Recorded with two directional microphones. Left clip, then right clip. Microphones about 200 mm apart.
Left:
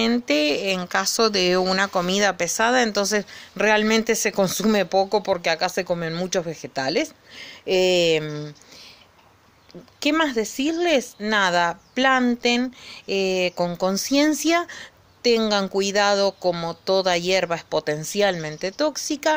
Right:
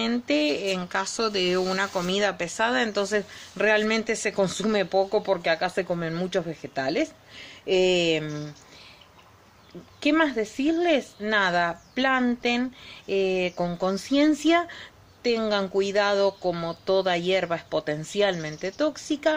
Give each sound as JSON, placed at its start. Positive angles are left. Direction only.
{"t": 0.0, "sound": "speech", "side_deg": 45}
{"t": 9.9, "sound": "speech", "side_deg": 40}